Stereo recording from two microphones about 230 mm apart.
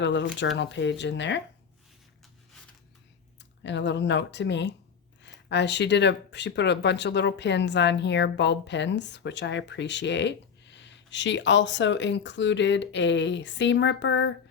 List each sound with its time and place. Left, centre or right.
0.0 s speech: left
3.6 s speech: left